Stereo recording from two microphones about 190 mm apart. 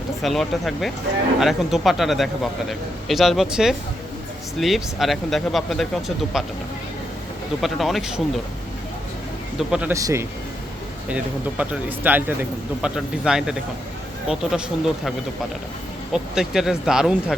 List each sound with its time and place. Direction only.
0.2 s speech: centre (ahead or behind)
7.6 s speech: centre (ahead or behind)
9.6 s speech: 5° right (ahead or behind)
9.9 s speech: 15° right (ahead or behind)
16.1 s speech: 5° right (ahead or behind)